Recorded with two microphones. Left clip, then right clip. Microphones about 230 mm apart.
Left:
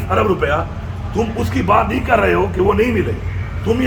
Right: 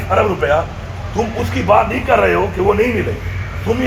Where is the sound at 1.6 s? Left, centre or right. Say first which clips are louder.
Right 3 dB; left.